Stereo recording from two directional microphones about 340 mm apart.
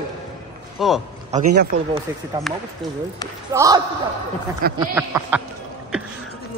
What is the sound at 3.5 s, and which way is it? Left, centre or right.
Speech, centre.